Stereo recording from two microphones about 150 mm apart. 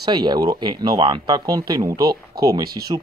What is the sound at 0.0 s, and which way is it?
Speech, 30° right (ahead or behind).